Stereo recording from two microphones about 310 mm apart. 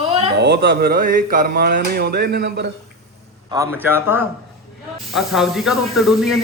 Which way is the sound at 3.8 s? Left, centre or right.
Centre.